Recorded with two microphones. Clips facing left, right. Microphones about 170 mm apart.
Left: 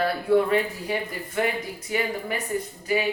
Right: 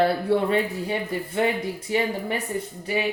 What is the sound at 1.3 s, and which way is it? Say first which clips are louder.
Speech: right 2 dB; 30° right (ahead or behind).